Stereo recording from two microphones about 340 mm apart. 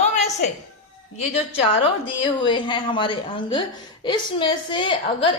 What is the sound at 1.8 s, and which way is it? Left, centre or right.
A woman's voice, centre.